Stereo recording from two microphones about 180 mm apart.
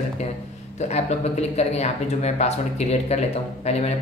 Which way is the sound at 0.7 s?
40° left (ahead or behind).